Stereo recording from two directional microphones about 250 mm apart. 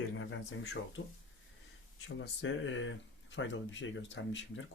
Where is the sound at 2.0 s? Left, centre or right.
Left.